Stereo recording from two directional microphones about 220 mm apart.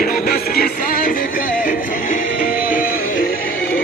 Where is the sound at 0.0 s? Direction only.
40° left (ahead or behind).